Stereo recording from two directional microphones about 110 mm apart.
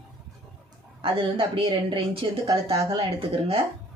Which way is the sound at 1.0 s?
50° right (ahead or behind).